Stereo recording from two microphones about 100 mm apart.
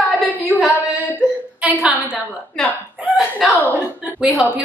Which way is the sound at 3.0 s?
15° right (ahead or behind).